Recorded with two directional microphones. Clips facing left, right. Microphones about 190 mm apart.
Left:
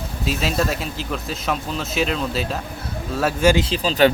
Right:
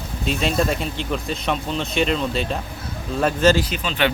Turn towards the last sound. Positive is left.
turn(degrees=35)  # may be behind; listen again after turning